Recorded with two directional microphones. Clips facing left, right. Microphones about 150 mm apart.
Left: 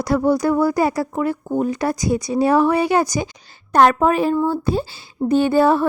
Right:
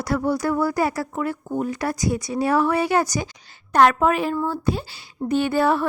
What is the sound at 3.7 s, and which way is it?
A woman's voice, 35° left (ahead or behind).